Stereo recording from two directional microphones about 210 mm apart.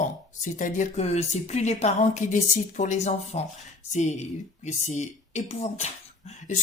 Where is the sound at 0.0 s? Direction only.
35° left (ahead or behind).